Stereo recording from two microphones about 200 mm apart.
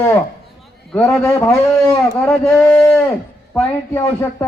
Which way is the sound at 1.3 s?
5° left (ahead or behind).